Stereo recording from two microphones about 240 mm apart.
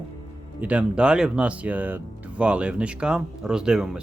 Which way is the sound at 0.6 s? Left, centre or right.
Centre.